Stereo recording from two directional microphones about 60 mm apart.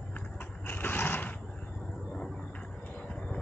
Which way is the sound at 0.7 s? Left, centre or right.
Left.